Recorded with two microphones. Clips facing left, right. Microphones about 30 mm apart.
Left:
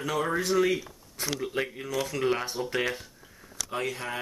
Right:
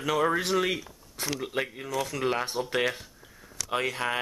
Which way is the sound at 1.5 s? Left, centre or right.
Centre.